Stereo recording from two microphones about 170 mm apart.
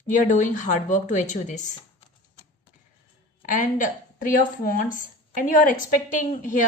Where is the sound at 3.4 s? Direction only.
50° left (ahead or behind).